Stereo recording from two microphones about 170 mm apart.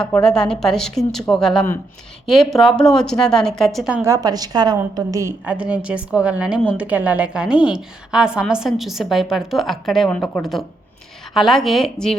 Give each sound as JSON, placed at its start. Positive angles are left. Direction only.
{"t": 0.0, "sound": "a woman's voice", "side_deg": 5}
{"t": 4.0, "sound": "a woman's voice", "side_deg": -20}
{"t": 5.5, "sound": "a woman's voice", "side_deg": -5}